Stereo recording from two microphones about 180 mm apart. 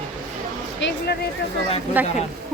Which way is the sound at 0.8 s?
75° left (ahead or behind).